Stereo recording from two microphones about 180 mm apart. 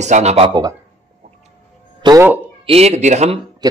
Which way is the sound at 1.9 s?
25° right (ahead or behind).